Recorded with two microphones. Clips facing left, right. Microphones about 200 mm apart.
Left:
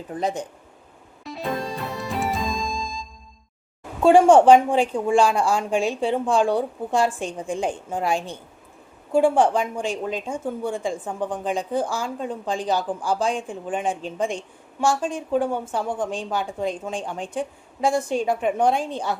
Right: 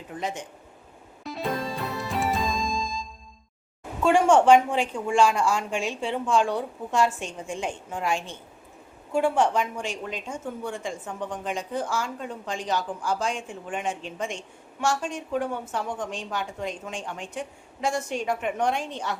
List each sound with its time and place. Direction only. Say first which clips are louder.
0.1 s speech: left 6 dB; 35° left (ahead or behind)
1.2 s music: left 1 dB; centre (ahead or behind)
4.0 s speech: left 6 dB; 35° left (ahead or behind)